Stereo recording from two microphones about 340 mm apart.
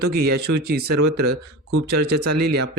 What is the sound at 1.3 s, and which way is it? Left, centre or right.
Speech, right.